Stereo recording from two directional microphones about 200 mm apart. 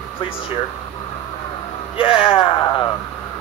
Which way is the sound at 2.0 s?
25° left (ahead or behind).